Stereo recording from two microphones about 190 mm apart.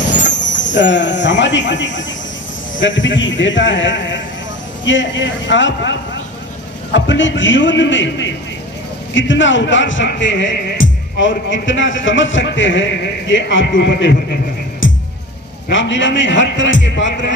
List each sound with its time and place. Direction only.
0.0 s speech: 70° left (ahead or behind)